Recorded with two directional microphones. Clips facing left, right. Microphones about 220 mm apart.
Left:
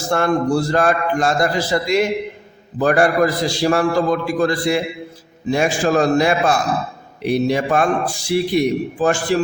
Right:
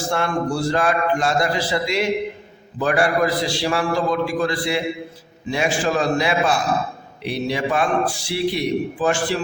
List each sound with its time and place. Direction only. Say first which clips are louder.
0.1 s a man's voice: left 6 dB; 45° left (ahead or behind)